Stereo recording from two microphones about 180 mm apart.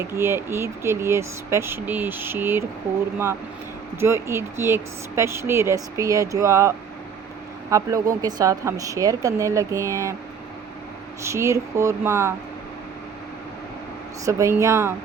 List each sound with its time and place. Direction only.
0.1 s speech: 15° right (ahead or behind)
4.0 s speech: 15° right (ahead or behind)
11.3 s speech: 15° right (ahead or behind)
14.3 s speech: 15° right (ahead or behind)